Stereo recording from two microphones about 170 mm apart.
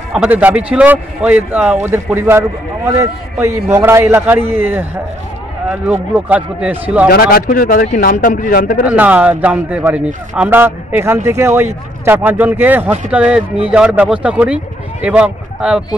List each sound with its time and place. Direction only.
0.1 s a man's voice: 5° right (ahead or behind)
7.1 s a man's voice: 60° left (ahead or behind)
8.8 s a man's voice: 10° right (ahead or behind)